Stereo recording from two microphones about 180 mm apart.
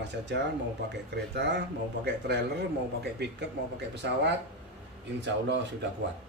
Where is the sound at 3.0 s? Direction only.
70° right (ahead or behind).